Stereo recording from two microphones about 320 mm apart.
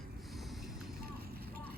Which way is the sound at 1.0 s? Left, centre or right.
Right.